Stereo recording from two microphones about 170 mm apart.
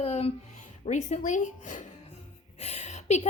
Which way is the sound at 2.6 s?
40° left (ahead or behind).